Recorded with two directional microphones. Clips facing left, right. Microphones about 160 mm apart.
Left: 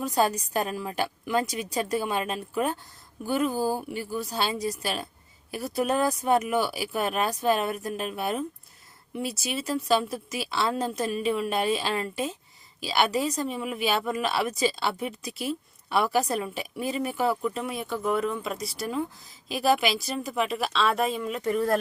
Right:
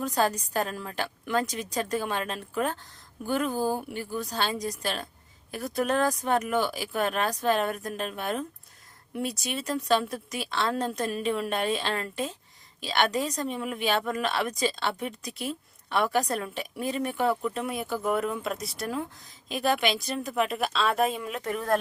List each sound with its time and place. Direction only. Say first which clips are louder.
0.0 s speech: left 1 dB; 10° left (ahead or behind)